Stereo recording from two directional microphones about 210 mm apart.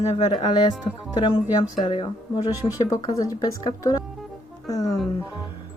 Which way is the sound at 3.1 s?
15° left (ahead or behind).